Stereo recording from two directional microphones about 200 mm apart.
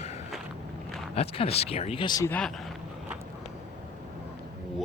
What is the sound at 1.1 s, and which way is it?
Speech, 30° left (ahead or behind).